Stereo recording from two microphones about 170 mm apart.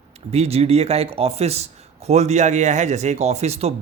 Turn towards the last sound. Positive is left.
turn(degrees=-40)  # may be behind; listen again after turning